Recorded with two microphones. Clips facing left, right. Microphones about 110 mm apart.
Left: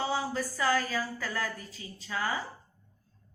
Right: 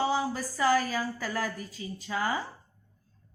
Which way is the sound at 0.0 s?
20° right (ahead or behind).